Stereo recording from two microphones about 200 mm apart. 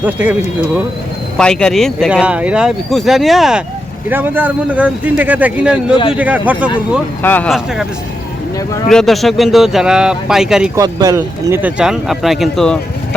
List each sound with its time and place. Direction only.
0.0 s speech: 5° right (ahead or behind)
1.4 s speech: 5° left (ahead or behind)
7.2 s speech: 10° left (ahead or behind)
7.5 s speech: centre (ahead or behind)
8.9 s speech: centre (ahead or behind)
10.8 s speech: 15° right (ahead or behind); by 12.8 s 5° left (ahead or behind)